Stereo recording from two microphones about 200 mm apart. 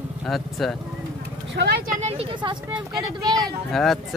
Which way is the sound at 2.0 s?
30° right (ahead or behind).